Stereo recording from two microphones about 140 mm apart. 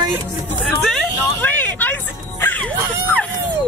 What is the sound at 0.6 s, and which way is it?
Speech, 5° left (ahead or behind).